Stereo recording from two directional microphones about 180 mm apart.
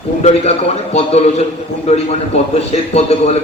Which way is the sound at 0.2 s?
40° left (ahead or behind).